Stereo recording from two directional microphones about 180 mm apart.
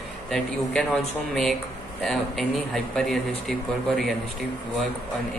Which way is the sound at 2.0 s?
Centre (ahead or behind).